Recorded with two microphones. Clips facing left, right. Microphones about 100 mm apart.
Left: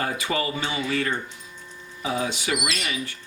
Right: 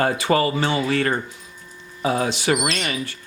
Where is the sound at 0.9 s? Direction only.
65° right (ahead or behind).